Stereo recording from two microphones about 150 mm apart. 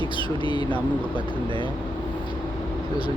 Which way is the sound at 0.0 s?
35° right (ahead or behind).